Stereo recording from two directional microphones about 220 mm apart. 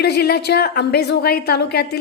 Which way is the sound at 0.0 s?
45° left (ahead or behind).